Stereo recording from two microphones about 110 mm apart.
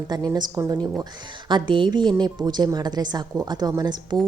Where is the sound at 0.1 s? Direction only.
40° right (ahead or behind).